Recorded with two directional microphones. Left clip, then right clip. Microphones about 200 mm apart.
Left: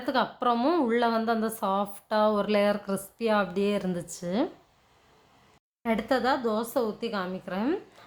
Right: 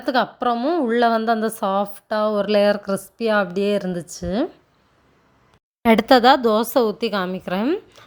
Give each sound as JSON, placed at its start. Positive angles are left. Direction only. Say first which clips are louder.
{"t": 0.0, "sound": "a woman's voice", "louder": "right 6 dB", "side_deg": -30}
{"t": 0.9, "sound": "a woman's voice", "louder": "right 8 dB", "side_deg": -30}
{"t": 5.8, "sound": "speech", "louder": "right 13 dB", "side_deg": -50}